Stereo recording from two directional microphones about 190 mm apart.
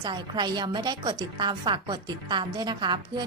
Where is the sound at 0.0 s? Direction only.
25° right (ahead or behind).